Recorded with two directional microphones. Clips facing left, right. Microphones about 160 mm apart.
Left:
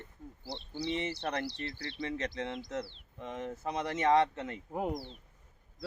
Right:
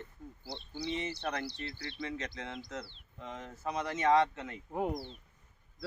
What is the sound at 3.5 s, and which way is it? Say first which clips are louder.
Speech: right 1 dB; 25° left (ahead or behind).